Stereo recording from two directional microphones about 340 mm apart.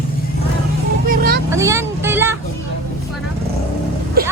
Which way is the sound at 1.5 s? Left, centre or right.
Centre.